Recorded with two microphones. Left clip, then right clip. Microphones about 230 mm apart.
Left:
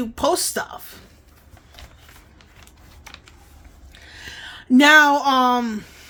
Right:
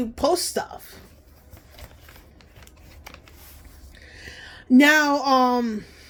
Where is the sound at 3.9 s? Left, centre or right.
Centre.